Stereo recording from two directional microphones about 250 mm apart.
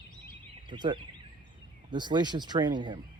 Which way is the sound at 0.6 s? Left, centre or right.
Centre.